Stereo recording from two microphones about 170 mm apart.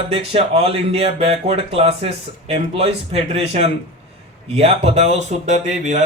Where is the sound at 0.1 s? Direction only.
35° right (ahead or behind).